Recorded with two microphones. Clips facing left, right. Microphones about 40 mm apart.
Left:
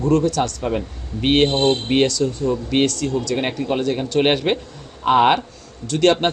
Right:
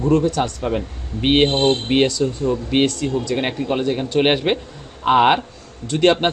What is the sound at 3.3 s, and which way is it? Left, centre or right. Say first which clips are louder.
Speech: even; centre.